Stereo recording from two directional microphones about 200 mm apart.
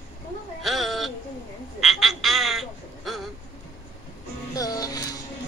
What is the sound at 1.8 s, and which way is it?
Frog, centre (ahead or behind).